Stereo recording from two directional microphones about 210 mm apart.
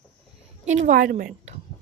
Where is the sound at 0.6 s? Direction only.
35° right (ahead or behind).